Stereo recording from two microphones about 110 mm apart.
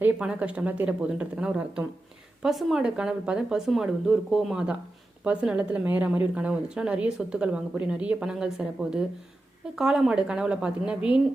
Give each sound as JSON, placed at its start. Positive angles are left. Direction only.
{"t": 0.0, "sound": "a woman's voice", "side_deg": -10}